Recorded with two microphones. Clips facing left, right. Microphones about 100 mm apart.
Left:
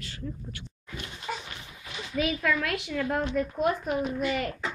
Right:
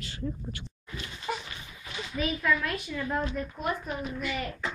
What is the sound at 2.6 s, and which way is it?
Speech, 85° left.